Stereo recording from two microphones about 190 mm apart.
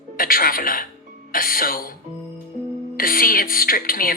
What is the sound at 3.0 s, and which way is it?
Speech, 50° left (ahead or behind).